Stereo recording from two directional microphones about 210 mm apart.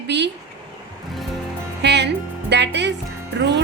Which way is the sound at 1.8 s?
55° right (ahead or behind).